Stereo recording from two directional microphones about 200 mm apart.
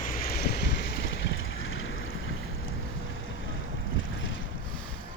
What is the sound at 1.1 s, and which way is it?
Vehicle, 75° left (ahead or behind).